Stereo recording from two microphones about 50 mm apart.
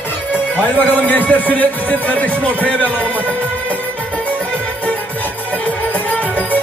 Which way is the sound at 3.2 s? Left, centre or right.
Left.